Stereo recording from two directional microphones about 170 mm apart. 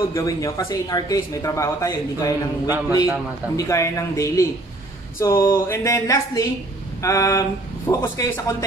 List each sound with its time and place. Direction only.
0.1 s speech: 20° left (ahead or behind)